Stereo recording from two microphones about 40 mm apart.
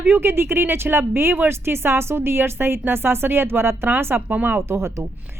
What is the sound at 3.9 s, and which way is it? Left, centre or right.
Speech, right.